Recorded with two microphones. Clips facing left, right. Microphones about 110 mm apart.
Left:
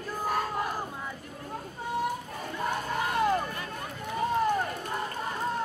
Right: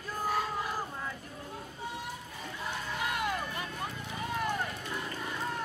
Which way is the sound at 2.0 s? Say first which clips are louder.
Left 9 dB; 50° left (ahead or behind).